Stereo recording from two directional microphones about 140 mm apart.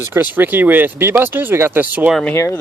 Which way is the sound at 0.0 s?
15° right (ahead or behind).